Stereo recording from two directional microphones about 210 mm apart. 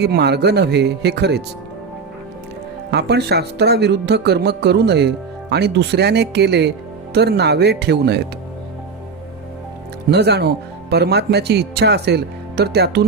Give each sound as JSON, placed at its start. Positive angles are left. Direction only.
{"t": 0.0, "sound": "speech", "side_deg": -50}
{"t": 2.9, "sound": "speech", "side_deg": -50}
{"t": 10.1, "sound": "speech", "side_deg": -50}